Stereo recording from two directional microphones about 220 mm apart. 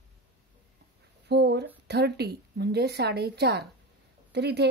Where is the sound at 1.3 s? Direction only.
50° right (ahead or behind).